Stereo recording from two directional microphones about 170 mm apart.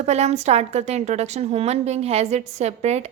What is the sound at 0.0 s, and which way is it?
A woman's voice, 40° right (ahead or behind).